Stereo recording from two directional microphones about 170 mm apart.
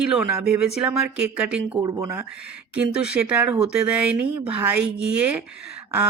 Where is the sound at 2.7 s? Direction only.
5° right (ahead or behind).